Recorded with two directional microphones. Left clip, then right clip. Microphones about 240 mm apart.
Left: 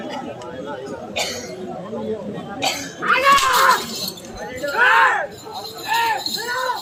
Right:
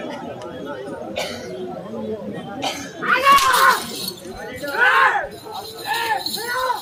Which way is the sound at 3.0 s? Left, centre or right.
Centre.